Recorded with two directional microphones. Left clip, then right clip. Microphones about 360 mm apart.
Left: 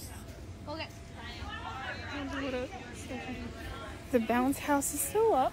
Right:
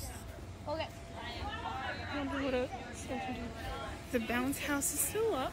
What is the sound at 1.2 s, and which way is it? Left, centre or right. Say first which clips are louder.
Hubbub: right 1 dB; right.